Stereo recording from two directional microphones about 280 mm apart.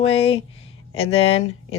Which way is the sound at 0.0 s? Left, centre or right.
Left.